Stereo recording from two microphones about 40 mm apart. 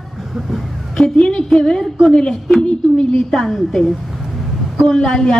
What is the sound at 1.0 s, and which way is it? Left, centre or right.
A woman's voice, left.